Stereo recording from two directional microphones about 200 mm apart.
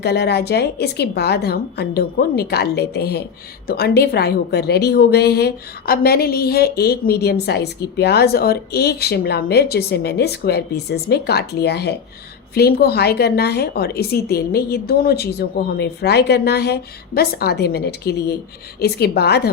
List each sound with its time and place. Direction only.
0.0 s a woman's voice: 55° left (ahead or behind)